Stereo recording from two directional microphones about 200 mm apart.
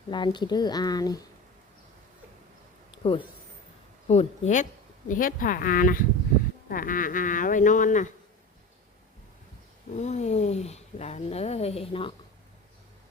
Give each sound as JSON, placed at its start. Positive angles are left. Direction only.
{"t": 0.1, "sound": "speech", "side_deg": 20}
{"t": 3.0, "sound": "speech", "side_deg": 25}
{"t": 9.9, "sound": "speech", "side_deg": 35}